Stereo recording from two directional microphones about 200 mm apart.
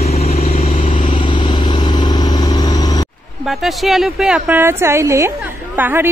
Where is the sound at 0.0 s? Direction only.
30° left (ahead or behind).